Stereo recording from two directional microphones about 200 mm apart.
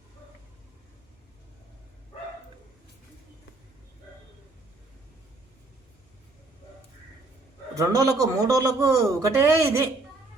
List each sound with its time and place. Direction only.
7.8 s a man's voice: 15° right (ahead or behind)